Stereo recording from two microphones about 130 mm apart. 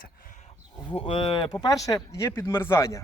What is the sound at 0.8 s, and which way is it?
Cattle, 45° left (ahead or behind).